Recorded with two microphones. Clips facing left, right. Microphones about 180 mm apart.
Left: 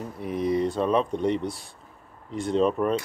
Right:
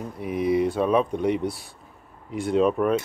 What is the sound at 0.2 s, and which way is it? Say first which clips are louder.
Speech: right 2 dB; 5° right (ahead or behind).